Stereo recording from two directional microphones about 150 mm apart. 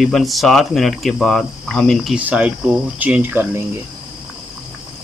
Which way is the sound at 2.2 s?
10° right (ahead or behind).